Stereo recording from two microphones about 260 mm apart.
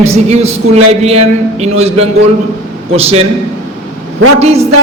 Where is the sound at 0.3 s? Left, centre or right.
Right.